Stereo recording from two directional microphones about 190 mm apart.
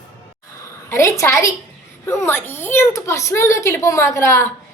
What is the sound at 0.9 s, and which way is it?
A woman's voice, 15° left (ahead or behind).